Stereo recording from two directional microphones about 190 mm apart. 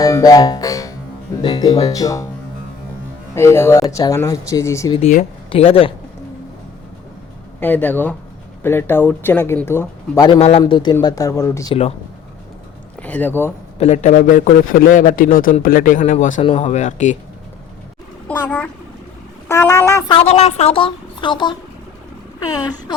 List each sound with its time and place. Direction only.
0.0 s music: 20° left (ahead or behind)
1.4 s a woman's voice: 25° left (ahead or behind)
3.3 s speech: 15° left (ahead or behind)
4.9 s speech: 35° left (ahead or behind)
7.6 s speech: 10° left (ahead or behind)
10.2 s a woman's voice: 30° left (ahead or behind); by 11.7 s 15° left (ahead or behind)
11.7 s speech: 30° left (ahead or behind)
13.0 s speech: 10° left (ahead or behind)
13.7 s a man's voice: 35° left (ahead or behind)
18.3 s a sound: 5° left (ahead or behind)
19.5 s speech: 15° left (ahead or behind)
20.1 s a woman's voice: 35° left (ahead or behind)